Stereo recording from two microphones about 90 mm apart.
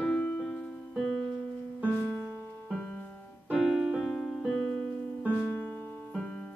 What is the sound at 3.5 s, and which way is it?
Keyboard, centre (ahead or behind).